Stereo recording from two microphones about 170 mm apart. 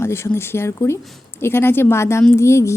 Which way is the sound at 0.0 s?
15° left (ahead or behind).